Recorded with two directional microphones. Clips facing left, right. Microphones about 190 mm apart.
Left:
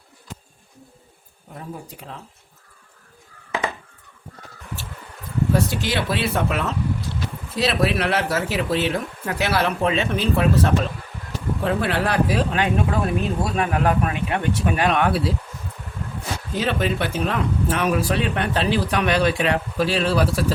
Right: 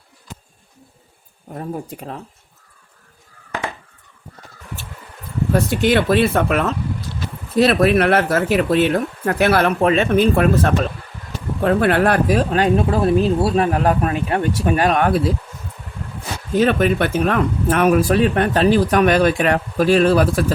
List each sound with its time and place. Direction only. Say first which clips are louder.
1.5 s speech: right 8 dB; 50° right (ahead or behind)
5.5 s speech: right 10 dB; 55° right (ahead or behind)
16.6 s speech: right 7 dB; 55° right (ahead or behind)